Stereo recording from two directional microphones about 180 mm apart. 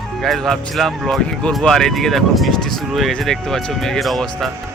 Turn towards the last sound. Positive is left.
turn(degrees=0)  # may be behind; listen again after turning